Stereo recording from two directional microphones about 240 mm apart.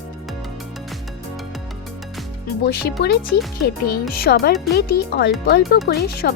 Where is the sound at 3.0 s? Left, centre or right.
Left.